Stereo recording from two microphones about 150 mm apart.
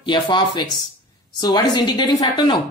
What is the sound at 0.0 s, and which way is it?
A man's voice, 30° left (ahead or behind).